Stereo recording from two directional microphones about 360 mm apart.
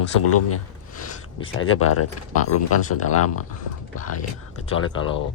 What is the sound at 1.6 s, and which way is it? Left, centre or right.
Speech, left.